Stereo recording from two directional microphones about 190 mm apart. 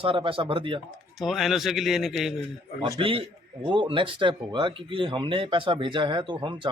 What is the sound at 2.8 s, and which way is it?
Speech, 25° right (ahead or behind).